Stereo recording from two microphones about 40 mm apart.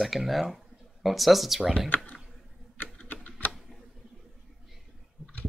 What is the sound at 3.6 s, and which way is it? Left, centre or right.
Tick, centre.